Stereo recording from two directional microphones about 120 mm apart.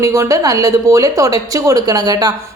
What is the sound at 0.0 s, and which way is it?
Speech, 25° right (ahead or behind).